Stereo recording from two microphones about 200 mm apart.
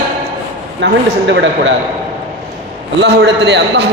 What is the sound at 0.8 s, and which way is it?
Speech, 65° right (ahead or behind).